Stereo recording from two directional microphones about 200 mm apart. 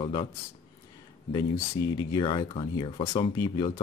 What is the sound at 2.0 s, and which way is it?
Speech, 20° left (ahead or behind).